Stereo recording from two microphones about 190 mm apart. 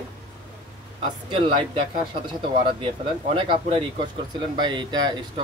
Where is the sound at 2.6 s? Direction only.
30° right (ahead or behind).